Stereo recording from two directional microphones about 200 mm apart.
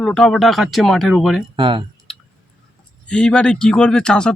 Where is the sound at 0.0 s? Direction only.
Centre (ahead or behind).